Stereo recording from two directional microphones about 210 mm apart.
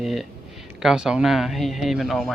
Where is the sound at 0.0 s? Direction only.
Centre (ahead or behind).